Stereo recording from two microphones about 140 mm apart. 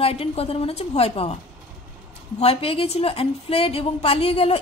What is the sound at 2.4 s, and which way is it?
A woman's voice, 45° left (ahead or behind).